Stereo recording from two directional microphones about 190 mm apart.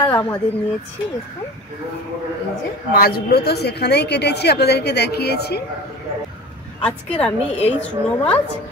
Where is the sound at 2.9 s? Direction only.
50° left (ahead or behind).